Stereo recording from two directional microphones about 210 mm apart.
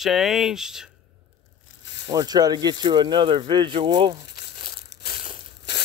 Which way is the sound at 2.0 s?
20° right (ahead or behind).